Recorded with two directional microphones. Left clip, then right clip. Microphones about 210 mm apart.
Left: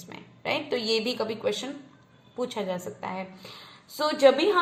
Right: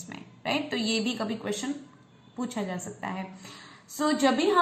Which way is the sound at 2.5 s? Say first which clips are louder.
Left 3 dB; 30° left (ahead or behind).